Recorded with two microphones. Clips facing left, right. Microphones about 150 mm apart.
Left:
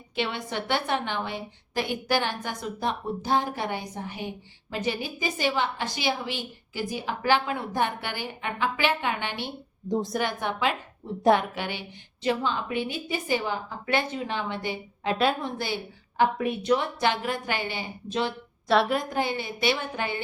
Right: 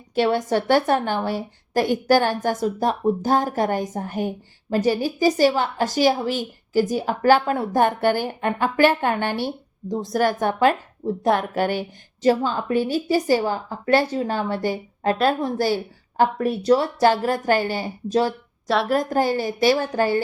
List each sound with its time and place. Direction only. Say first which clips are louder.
0.1 s a woman's voice: right 11 dB; 40° right (ahead or behind)
9.9 s a woman's voice: even; centre (ahead or behind)
10.2 s a woman's voice: right 8 dB; 45° right (ahead or behind)
11.2 s a woman's voice: even; centre (ahead or behind)
11.5 s a woman's voice: right 11 dB; 45° right (ahead or behind)
15.1 s a woman's voice: right 4 dB; centre (ahead or behind)
15.4 s a woman's voice: right 9 dB; 40° right (ahead or behind)
18.7 s a woman's voice: right 1 dB; centre (ahead or behind)
18.9 s a woman's voice: right 7 dB; 40° right (ahead or behind)